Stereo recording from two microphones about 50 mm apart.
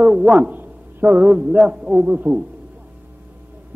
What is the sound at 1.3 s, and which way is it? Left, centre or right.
A man's voice, right.